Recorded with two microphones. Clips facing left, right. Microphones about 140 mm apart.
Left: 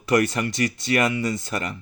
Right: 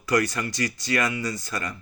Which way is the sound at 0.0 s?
25° left (ahead or behind).